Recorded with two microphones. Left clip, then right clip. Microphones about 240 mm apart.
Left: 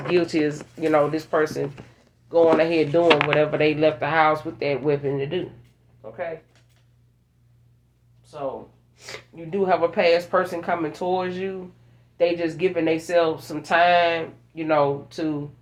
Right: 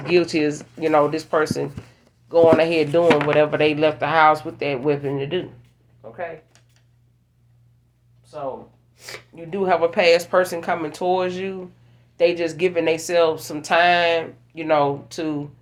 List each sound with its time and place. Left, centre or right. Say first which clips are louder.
0.1 s speech: right 3 dB; right
9.0 s speech: right 1 dB; right